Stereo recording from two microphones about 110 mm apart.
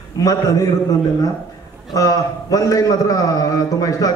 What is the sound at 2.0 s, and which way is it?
A man's voice, 30° left (ahead or behind).